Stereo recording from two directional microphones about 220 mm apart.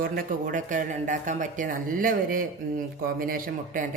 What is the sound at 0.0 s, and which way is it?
Speech, 40° right (ahead or behind).